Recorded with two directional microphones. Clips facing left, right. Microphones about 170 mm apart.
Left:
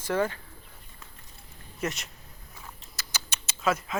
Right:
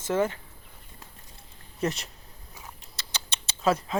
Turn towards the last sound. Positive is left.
turn(degrees=-35)  # may be behind; listen again after turning